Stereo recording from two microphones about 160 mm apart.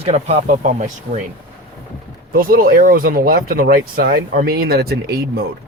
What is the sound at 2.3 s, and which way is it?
Speech, 60° right (ahead or behind).